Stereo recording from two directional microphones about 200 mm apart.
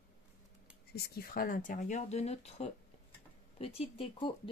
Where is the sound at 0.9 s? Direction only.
50° left (ahead or behind).